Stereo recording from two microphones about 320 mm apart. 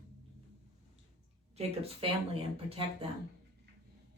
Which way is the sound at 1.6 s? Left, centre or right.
Centre.